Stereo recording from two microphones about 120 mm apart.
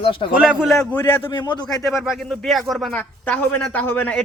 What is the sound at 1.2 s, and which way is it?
Speech, 40° left (ahead or behind).